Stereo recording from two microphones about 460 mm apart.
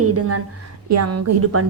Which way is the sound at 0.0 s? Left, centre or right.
Right.